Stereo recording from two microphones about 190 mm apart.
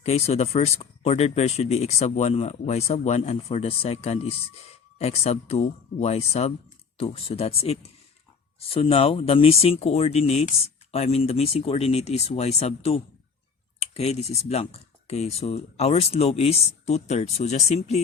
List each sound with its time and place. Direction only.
0.0 s speech: 35° left (ahead or behind)